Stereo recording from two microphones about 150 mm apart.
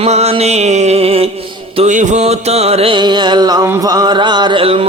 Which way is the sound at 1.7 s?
55° right (ahead or behind).